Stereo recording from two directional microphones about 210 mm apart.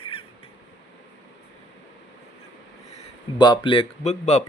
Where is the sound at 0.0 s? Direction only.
25° left (ahead or behind).